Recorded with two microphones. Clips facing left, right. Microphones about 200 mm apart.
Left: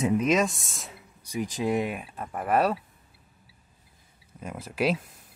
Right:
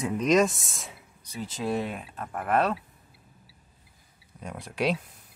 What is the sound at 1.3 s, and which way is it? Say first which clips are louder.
Speech: left 3 dB; 15° left (ahead or behind).